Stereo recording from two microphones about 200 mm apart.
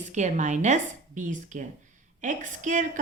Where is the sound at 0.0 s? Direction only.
35° right (ahead or behind).